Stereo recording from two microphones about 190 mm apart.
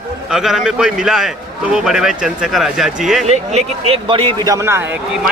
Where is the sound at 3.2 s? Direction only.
30° right (ahead or behind); by 5.0 s 10° right (ahead or behind).